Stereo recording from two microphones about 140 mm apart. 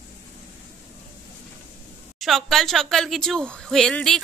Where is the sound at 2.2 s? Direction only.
Centre (ahead or behind).